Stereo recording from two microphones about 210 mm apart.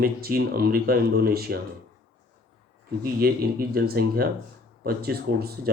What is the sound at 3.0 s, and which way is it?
Speech, 45° right (ahead or behind).